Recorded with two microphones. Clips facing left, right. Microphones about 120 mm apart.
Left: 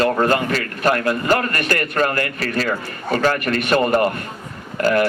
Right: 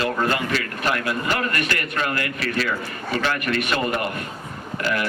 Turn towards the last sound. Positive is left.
turn(degrees=45)  # may be behind; listen again after turning